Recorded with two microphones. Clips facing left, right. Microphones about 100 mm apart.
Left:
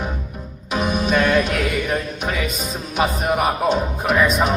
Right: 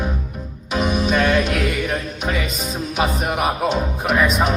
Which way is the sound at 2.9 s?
Centre (ahead or behind).